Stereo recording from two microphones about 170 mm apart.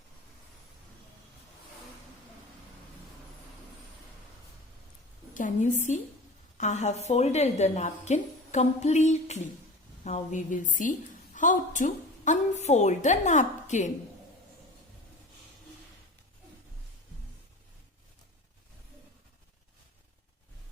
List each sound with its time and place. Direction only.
5.3 s a woman's voice: 50° left (ahead or behind)